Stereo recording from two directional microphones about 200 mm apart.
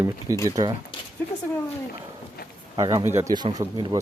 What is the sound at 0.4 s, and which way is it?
Speech, 20° right (ahead or behind).